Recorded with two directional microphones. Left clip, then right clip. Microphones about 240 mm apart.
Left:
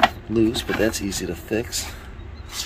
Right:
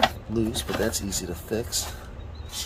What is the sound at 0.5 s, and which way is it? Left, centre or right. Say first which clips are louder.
Speech: left 5 dB; left.